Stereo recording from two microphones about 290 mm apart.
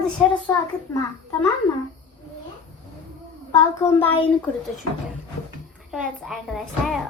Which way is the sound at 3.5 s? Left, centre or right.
Centre.